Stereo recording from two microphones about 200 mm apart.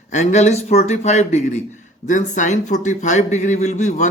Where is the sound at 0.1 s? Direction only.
35° left (ahead or behind).